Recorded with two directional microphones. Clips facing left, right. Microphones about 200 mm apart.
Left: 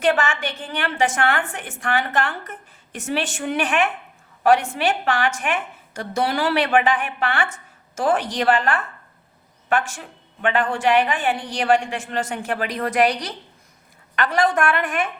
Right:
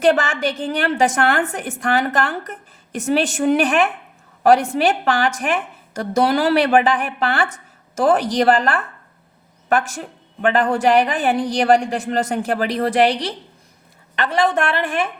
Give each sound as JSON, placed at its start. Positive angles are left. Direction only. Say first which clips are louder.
{"t": 0.0, "sound": "a woman's voice", "louder": "right 4 dB", "side_deg": -40}